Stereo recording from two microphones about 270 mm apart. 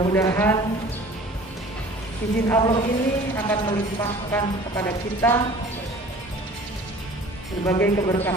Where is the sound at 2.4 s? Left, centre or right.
Centre.